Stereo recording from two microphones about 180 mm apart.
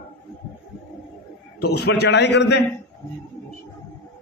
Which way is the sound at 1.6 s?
65° left (ahead or behind).